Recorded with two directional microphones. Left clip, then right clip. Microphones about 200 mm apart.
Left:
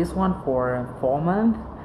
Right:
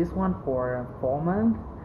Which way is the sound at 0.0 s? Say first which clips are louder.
Left 4 dB; 10° left (ahead or behind).